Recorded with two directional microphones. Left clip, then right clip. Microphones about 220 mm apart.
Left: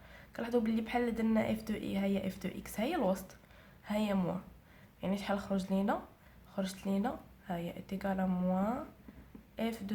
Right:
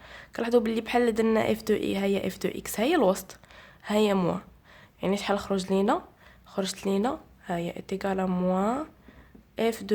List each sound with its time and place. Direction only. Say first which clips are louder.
0.0 s a woman's voice: right 10 dB; 40° right (ahead or behind)